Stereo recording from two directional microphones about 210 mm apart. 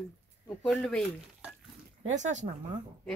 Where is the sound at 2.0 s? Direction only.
35° right (ahead or behind).